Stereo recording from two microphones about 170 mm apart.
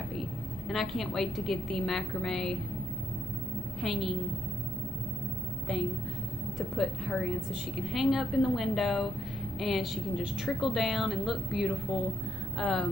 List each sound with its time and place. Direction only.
0.7 s a woman's voice: centre (ahead or behind)
3.8 s a woman's voice: centre (ahead or behind)
6.8 s a woman's voice: centre (ahead or behind)